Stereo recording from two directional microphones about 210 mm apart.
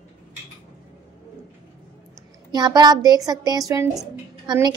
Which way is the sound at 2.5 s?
20° right (ahead or behind).